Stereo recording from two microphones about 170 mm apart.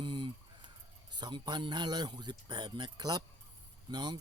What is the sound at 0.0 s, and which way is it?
Chicken, 25° right (ahead or behind).